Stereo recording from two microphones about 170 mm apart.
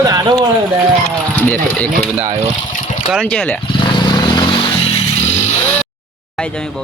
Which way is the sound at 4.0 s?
25° left (ahead or behind).